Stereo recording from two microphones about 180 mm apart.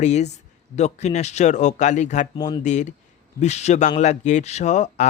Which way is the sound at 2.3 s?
25° left (ahead or behind).